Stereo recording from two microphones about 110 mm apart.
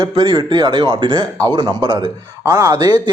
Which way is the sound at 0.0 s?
40° right (ahead or behind).